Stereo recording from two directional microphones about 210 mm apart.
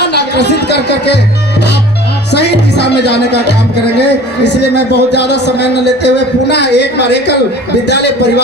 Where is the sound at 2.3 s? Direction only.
55° left (ahead or behind).